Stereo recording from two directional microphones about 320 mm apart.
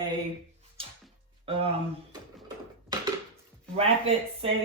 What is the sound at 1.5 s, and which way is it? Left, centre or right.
Speech, centre.